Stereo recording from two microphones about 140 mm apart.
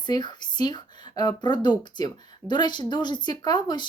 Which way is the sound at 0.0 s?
30° left (ahead or behind).